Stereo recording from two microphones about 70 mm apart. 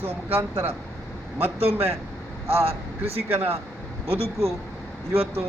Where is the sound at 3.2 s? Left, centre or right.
Right.